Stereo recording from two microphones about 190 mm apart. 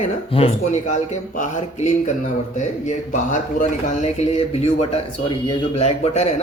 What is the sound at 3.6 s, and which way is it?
Speech, 35° left (ahead or behind).